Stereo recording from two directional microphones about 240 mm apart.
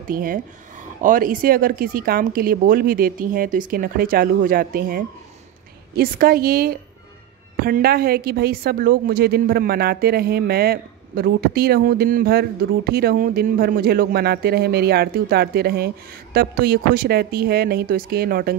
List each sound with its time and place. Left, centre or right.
0.0 s a woman's voice: right